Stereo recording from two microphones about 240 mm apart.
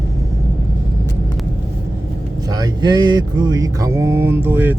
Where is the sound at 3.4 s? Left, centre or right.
Centre.